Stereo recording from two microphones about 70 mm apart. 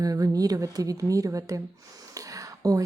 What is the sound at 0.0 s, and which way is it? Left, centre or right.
A woman's voice, right.